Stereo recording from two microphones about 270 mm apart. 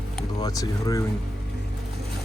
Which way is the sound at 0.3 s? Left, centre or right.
Centre.